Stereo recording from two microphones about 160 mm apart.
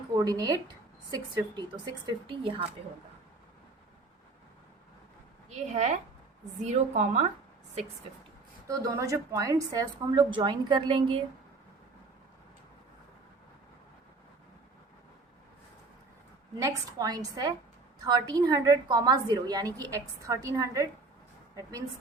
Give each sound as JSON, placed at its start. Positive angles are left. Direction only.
{"t": 0.1, "sound": "a woman's voice", "side_deg": -25}
{"t": 5.5, "sound": "a woman's voice", "side_deg": -45}
{"t": 8.6, "sound": "a woman's voice", "side_deg": -20}
{"t": 16.6, "sound": "a woman's voice", "side_deg": -20}